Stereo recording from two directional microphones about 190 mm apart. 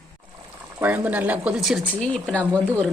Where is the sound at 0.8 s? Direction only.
10° right (ahead or behind).